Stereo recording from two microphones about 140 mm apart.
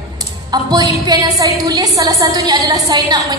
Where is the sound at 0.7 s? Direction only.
30° right (ahead or behind).